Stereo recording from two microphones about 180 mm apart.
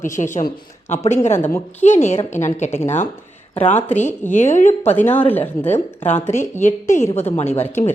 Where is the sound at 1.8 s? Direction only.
40° left (ahead or behind).